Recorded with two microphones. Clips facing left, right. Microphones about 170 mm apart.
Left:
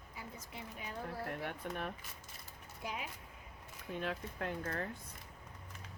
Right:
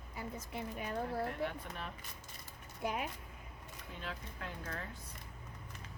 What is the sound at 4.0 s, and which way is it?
Speech, 55° left (ahead or behind).